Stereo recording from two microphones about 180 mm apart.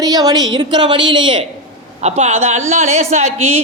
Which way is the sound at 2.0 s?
35° right (ahead or behind).